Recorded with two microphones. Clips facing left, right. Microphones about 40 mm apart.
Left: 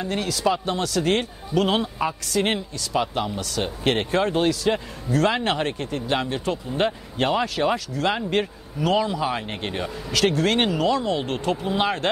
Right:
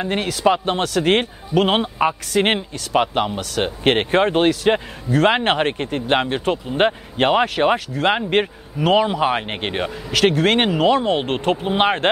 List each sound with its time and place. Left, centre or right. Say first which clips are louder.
0.0 s a man's voice: right 5 dB; right